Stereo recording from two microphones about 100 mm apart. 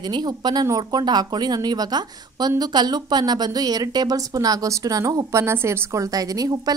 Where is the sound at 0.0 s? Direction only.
45° right (ahead or behind).